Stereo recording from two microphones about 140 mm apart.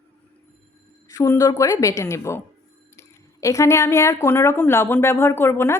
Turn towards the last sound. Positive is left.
turn(degrees=15)  # may be behind; listen again after turning